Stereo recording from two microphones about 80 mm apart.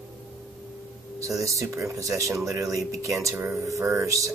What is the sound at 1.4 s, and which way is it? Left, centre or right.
Speech, right.